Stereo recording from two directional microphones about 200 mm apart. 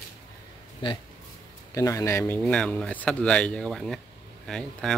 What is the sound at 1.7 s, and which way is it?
Speech, 15° left (ahead or behind).